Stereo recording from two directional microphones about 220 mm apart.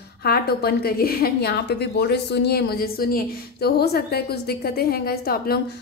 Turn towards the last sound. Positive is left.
turn(degrees=45)  # may be behind; listen again after turning